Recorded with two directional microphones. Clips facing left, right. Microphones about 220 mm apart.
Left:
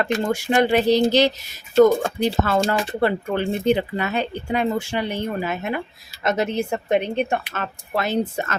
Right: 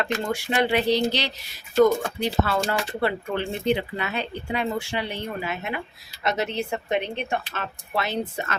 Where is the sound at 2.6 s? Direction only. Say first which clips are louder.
Left 5 dB; 25° left (ahead or behind).